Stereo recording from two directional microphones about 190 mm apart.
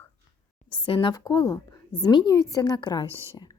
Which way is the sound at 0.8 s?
25° left (ahead or behind).